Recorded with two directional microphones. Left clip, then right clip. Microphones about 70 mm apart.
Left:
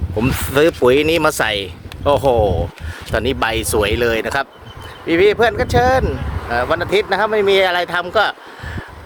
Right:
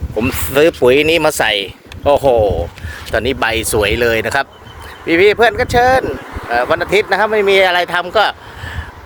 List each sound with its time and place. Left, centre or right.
0.3 s speech: centre
2.1 s speech: left
3.1 s speech: left; by 8.0 s centre
8.1 s a sound: centre